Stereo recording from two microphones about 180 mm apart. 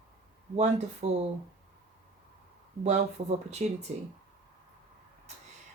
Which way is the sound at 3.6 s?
40° right (ahead or behind).